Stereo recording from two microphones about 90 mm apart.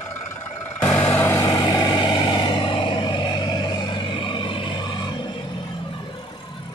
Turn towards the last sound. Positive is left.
turn(degrees=55)  # may be behind; listen again after turning